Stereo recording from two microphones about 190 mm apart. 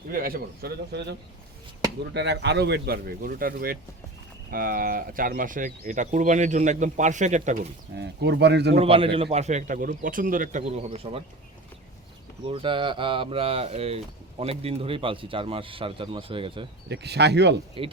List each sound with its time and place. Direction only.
0.1 s speech: 50° right (ahead or behind)
2.1 s speech: 65° right (ahead or behind); by 7.7 s 40° right (ahead or behind)
7.9 s speech: 60° right (ahead or behind)
8.7 s speech: 30° right (ahead or behind)
12.5 s speech: 25° right (ahead or behind)
16.9 s speech: 60° right (ahead or behind)